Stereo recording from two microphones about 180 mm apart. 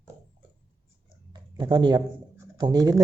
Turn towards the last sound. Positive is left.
turn(degrees=-20)  # may be behind; listen again after turning